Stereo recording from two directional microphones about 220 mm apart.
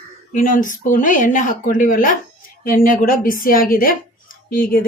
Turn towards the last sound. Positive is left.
turn(degrees=40)  # may be behind; listen again after turning